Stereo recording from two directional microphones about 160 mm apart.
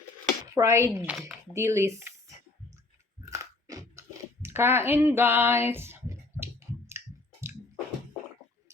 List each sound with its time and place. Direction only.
0.4 s speech: 20° right (ahead or behind)
3.2 s crunch: 20° right (ahead or behind)
4.4 s a sound: 15° right (ahead or behind)